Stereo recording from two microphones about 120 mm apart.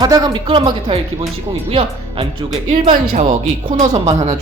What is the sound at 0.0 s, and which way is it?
Speech, 35° right (ahead or behind).